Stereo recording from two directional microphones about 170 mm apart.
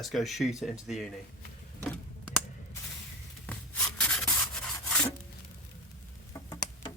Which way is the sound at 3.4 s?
5° left (ahead or behind).